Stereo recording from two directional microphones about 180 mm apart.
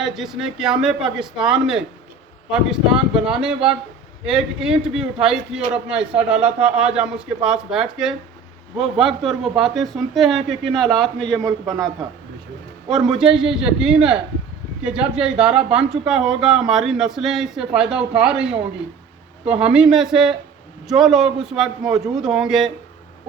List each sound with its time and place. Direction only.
0.0 s speech: centre (ahead or behind)
11.4 s a man's voice: 20° right (ahead or behind)
13.1 s speech: 5° right (ahead or behind)
19.5 s speech: 5° right (ahead or behind)